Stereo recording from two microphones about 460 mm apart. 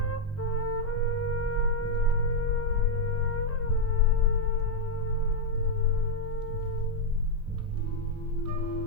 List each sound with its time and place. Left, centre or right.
0.0 s music: left